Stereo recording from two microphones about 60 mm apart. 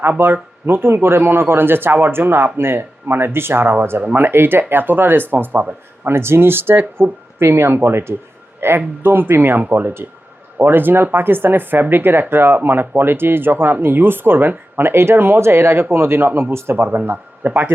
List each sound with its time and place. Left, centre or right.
0.2 s speech: right
6.1 s speech: right